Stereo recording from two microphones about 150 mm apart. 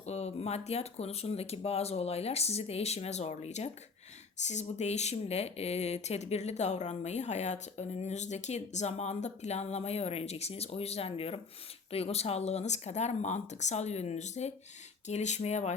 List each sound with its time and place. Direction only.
0.0 s speech: 45° left (ahead or behind)